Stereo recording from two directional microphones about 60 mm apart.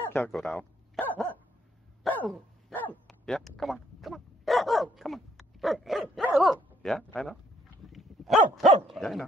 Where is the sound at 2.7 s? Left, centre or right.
Left.